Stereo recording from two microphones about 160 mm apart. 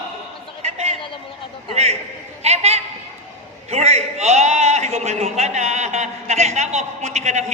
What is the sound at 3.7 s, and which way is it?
A man's voice, 40° right (ahead or behind).